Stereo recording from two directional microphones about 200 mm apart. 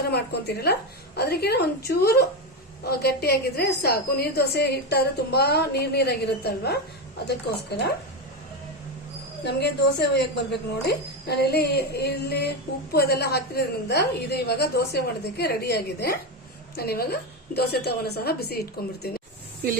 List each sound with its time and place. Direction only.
0.1 s a woman's voice: 55° left (ahead or behind)
9.4 s a woman's voice: 55° left (ahead or behind)